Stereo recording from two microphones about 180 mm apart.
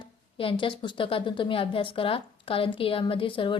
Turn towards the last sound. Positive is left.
turn(degrees=30)  # may be behind; listen again after turning